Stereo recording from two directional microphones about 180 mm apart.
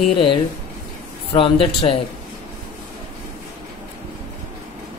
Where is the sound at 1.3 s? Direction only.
30° left (ahead or behind).